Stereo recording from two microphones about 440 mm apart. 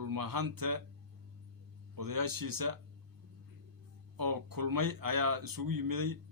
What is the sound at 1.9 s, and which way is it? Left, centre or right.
Speech, right.